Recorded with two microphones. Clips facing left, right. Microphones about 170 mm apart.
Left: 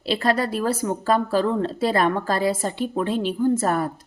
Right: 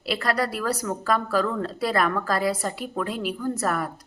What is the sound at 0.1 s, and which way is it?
Speech, 25° left (ahead or behind).